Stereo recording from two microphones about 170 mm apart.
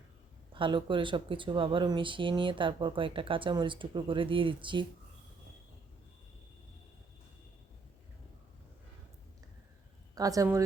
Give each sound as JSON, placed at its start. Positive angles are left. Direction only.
{"t": 0.5, "sound": "speech", "side_deg": -30}
{"t": 10.2, "sound": "speech", "side_deg": -20}